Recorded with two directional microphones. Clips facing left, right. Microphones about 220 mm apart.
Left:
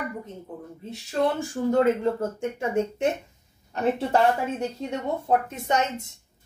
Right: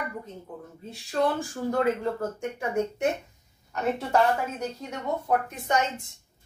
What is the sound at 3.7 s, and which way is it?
Speech, 25° left (ahead or behind).